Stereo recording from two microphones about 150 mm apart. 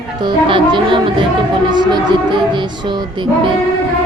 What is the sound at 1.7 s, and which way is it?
Music, 30° right (ahead or behind).